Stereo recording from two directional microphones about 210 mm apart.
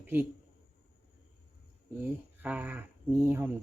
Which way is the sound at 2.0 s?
10° right (ahead or behind).